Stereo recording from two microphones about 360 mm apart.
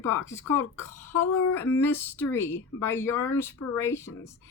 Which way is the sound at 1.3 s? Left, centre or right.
Left.